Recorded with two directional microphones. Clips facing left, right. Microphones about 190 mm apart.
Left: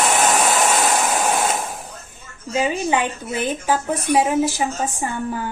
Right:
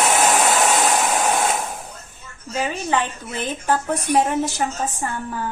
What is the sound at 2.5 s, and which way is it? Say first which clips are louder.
A woman's voice: left 3 dB; 15° left (ahead or behind).